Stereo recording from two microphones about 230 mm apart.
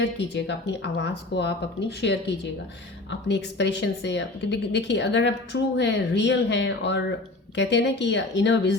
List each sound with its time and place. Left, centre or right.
0.0 s a woman's voice: left